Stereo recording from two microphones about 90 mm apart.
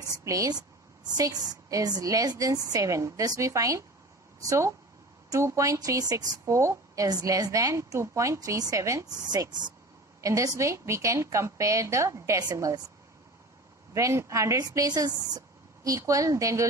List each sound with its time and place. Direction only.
0.2 s a woman's voice: 40° right (ahead or behind)
10.2 s a woman's voice: 40° right (ahead or behind)
13.9 s a woman's voice: 35° right (ahead or behind)